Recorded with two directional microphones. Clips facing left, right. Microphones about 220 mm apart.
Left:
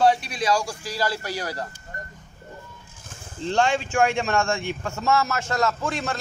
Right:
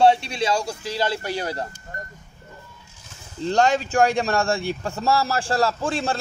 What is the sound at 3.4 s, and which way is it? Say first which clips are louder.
Speech: right 3 dB; 40° right (ahead or behind).